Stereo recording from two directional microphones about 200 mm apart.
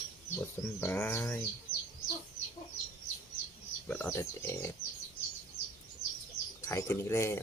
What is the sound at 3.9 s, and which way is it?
Speech, 10° left (ahead or behind).